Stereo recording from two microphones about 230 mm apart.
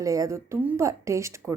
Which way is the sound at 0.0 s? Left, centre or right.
Centre.